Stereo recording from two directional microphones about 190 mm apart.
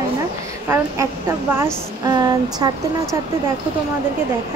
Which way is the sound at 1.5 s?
15° right (ahead or behind).